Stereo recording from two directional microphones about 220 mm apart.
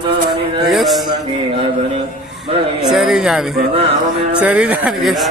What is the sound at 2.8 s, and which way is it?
Speech, centre (ahead or behind).